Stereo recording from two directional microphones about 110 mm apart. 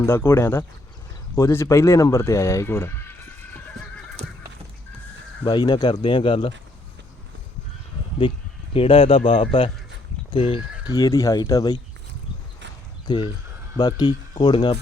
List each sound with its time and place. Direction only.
0.0 s speech: 20° left (ahead or behind)
5.4 s speech: 40° left (ahead or behind)
8.7 s speech: 55° left (ahead or behind)
10.8 s speech: 35° left (ahead or behind)
13.1 s speech: 50° left (ahead or behind)
13.7 s speech: 35° left (ahead or behind)